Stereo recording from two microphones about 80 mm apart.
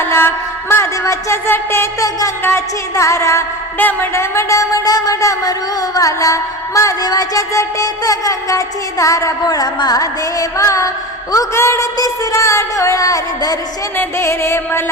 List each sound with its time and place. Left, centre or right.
0.0 s music: left
0.7 s music: left
2.0 s music: left
2.4 s music: left
3.8 s music: left
4.1 s music: left
11.9 s music: left
13.9 s music: left